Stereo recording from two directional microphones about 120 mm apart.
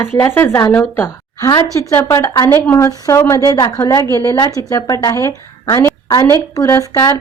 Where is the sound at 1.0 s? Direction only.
20° left (ahead or behind).